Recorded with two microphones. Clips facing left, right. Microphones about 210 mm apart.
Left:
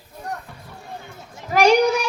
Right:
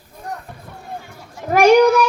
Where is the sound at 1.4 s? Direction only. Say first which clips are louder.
Right 5 dB; 55° right (ahead or behind).